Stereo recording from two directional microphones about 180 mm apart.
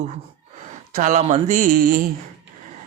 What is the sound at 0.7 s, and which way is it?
Speech, 45° right (ahead or behind).